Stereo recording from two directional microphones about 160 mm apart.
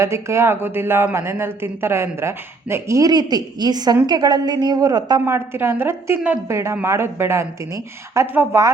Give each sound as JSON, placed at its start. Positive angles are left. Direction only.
{"t": 0.0, "sound": "a woman's voice", "side_deg": -15}